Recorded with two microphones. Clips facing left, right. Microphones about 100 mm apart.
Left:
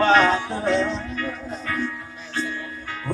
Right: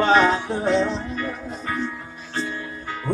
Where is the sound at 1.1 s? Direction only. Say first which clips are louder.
Even; 25° right (ahead or behind).